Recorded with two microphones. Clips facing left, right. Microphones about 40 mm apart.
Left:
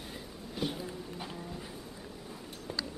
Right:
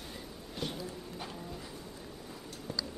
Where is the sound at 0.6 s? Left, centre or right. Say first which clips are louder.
Left 4 dB; centre.